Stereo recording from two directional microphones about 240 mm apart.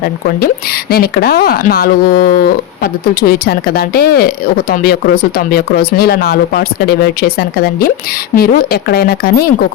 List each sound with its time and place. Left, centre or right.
0.4 s speech: left